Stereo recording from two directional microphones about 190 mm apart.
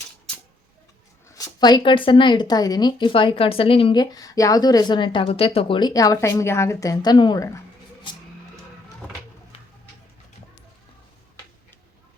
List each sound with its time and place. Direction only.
1.4 s speech: 20° left (ahead or behind)